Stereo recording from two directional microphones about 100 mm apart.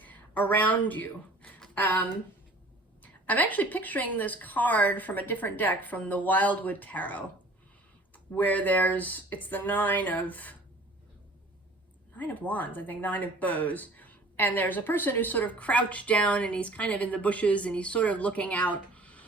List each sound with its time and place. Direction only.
0.0 s a sound: 15° left (ahead or behind)
3.0 s speech: 15° left (ahead or behind)
8.4 s speech: 15° left (ahead or behind)
12.1 s speech: 15° left (ahead or behind)